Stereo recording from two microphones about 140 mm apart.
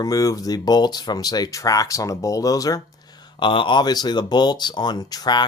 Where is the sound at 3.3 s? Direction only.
35° left (ahead or behind).